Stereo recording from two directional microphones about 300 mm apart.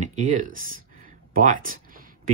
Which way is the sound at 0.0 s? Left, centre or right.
Right.